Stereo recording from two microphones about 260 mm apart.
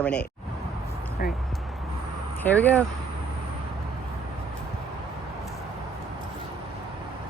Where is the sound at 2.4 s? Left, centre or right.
Centre.